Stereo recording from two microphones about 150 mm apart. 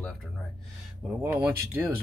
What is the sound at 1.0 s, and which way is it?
Speech, centre (ahead or behind).